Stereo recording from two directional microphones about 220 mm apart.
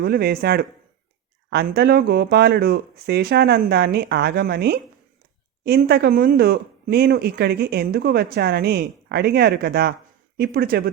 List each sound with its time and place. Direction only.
0.0 s speech: 45° right (ahead or behind)